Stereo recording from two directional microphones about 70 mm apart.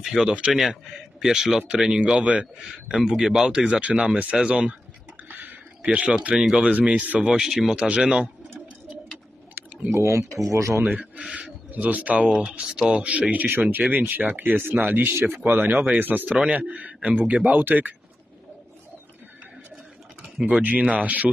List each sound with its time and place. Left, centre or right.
0.0 s speech: centre
0.3 s a man's voice: centre
0.6 s a man's voice: centre
5.4 s a sound: right
6.3 s a man's voice: centre
6.7 s speech: right
7.2 s a man's voice: centre
9.9 s speech: right
10.9 s speech: centre
12.3 s speech: centre
12.5 s speech: centre; by 17.9 s right
20.4 s speech: centre